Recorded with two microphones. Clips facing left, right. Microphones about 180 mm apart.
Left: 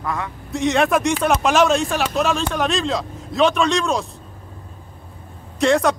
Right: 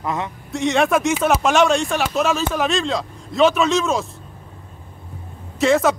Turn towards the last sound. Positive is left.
turn(degrees=0)  # may be behind; listen again after turning